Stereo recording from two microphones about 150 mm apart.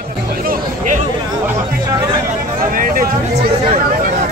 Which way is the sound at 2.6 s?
70° right (ahead or behind).